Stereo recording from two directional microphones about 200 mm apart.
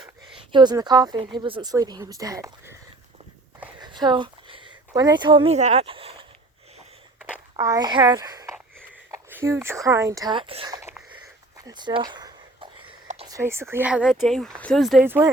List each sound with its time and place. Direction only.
0.5 s speech: 20° right (ahead or behind)
3.8 s a sound: 20° right (ahead or behind)
7.6 s a child's voice: 20° right (ahead or behind)
11.5 s a sound: 20° right (ahead or behind)
13.2 s speech: 15° right (ahead or behind)
15.0 s a child's voice: 10° right (ahead or behind)